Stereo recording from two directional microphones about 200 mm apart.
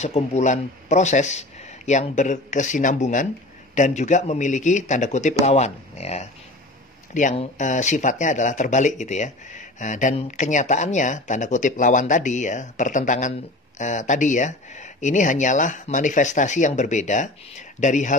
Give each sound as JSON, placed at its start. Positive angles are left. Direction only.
{"t": 0.0, "sound": "speech", "side_deg": 35}